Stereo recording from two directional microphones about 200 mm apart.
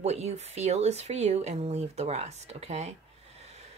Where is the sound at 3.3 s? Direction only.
30° right (ahead or behind).